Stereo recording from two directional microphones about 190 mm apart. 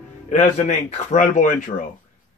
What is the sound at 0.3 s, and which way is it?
A man's voice, 40° left (ahead or behind).